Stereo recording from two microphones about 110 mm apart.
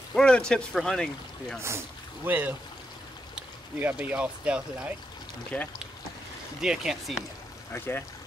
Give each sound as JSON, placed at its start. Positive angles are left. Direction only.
{"t": 0.1, "sound": "speech", "side_deg": 10}
{"t": 1.6, "sound": "speech", "side_deg": -25}
{"t": 3.8, "sound": "speech", "side_deg": -15}
{"t": 5.5, "sound": "speech", "side_deg": 15}
{"t": 6.6, "sound": "speech", "side_deg": -5}
{"t": 7.7, "sound": "speech", "side_deg": 20}